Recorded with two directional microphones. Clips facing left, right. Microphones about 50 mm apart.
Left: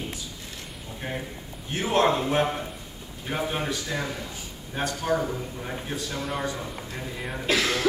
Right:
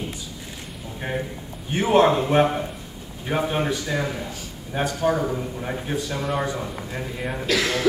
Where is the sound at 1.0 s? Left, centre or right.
Centre.